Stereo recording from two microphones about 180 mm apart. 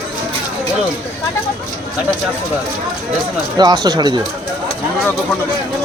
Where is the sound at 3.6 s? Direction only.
20° right (ahead or behind).